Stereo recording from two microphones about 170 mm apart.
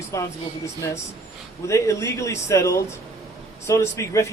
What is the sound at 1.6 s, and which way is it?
A man's voice, 20° left (ahead or behind).